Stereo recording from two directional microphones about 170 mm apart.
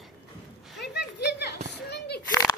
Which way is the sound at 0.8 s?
75° left (ahead or behind).